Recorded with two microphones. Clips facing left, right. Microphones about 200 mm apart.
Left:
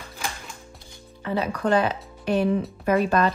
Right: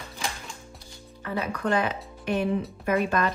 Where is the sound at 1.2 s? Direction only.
25° left (ahead or behind).